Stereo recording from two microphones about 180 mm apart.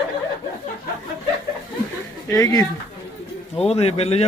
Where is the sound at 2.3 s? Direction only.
20° left (ahead or behind).